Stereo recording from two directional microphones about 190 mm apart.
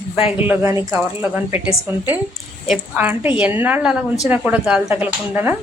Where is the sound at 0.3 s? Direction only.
10° right (ahead or behind).